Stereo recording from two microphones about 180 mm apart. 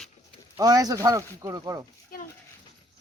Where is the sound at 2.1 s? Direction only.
55° left (ahead or behind).